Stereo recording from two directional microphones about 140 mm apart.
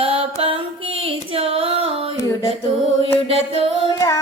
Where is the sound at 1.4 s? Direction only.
45° right (ahead or behind).